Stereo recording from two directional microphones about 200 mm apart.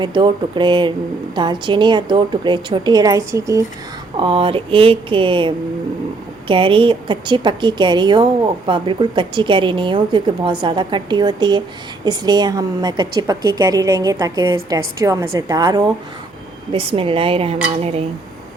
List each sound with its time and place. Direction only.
0.0 s a woman's voice: 25° right (ahead or behind)
4.2 s a woman's voice: 25° right (ahead or behind)